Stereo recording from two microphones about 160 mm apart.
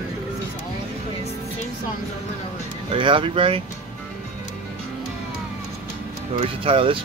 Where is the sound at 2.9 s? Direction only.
30° right (ahead or behind).